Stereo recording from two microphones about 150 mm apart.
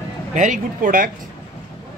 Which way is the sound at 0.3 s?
60° right (ahead or behind).